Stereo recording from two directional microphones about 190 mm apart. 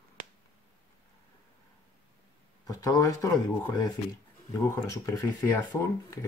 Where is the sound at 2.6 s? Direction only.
20° left (ahead or behind).